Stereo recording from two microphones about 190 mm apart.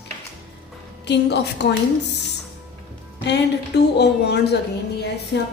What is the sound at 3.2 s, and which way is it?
A woman's voice, 65° left (ahead or behind).